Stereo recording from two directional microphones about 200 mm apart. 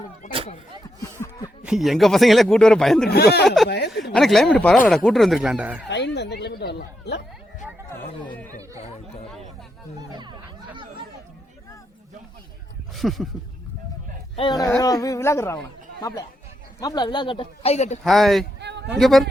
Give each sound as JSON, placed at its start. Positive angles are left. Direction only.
{"t": 1.6, "sound": "speech", "side_deg": 0}
{"t": 3.1, "sound": "speech", "side_deg": 50}
{"t": 3.4, "sound": "speech", "side_deg": 0}
{"t": 3.7, "sound": "a sound", "side_deg": 55}
{"t": 4.1, "sound": "speech", "side_deg": 0}
{"t": 5.9, "sound": "a sound", "side_deg": 60}
{"t": 10.1, "sound": "chatter", "side_deg": -20}
{"t": 13.0, "sound": "speech", "side_deg": 0}
{"t": 14.3, "sound": "speech", "side_deg": 20}
{"t": 18.0, "sound": "speech", "side_deg": 0}
{"t": 18.6, "sound": "a sound", "side_deg": -60}
{"t": 18.9, "sound": "speech", "side_deg": 0}